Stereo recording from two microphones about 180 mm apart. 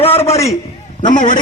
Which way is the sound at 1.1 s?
50° left (ahead or behind).